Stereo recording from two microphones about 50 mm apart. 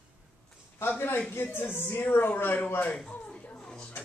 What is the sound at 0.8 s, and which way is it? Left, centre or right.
Speech, left.